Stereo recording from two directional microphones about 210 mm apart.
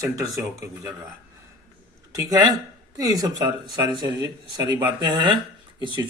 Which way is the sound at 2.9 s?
15° right (ahead or behind).